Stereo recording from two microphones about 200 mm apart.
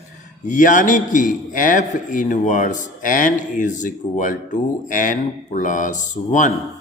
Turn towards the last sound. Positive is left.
turn(degrees=40)  # may be behind; listen again after turning